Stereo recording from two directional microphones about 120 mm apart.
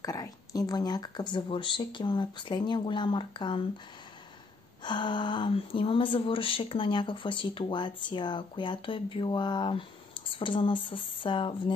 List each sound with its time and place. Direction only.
0.0 s speech: 30° left (ahead or behind)
4.8 s speech: 40° left (ahead or behind)